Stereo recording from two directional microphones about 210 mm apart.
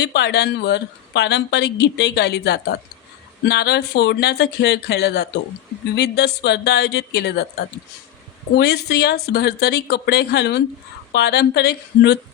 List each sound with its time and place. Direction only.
0.0 s speech: 55° left (ahead or behind)
8.5 s speech: 50° left (ahead or behind)